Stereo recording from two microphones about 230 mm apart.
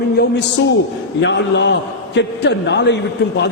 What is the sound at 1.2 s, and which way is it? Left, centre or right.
A man's voice, left.